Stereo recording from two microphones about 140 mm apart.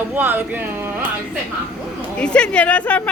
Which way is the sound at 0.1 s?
15° right (ahead or behind).